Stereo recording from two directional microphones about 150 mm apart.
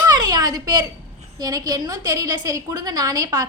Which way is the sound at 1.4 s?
25° right (ahead or behind).